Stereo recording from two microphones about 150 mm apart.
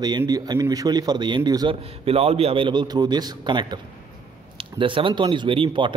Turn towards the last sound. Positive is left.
turn(degrees=-35)  # may be behind; listen again after turning